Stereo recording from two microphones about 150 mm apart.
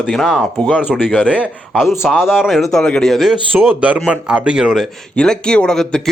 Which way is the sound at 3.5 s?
10° right (ahead or behind).